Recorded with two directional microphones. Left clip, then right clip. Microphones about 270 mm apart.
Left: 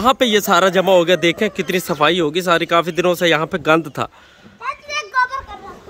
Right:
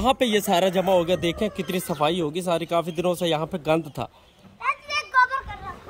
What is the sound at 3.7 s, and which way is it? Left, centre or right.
Speech, left.